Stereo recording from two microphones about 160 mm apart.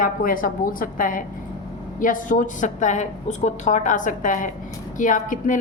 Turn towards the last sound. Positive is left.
turn(degrees=55)  # may be behind; listen again after turning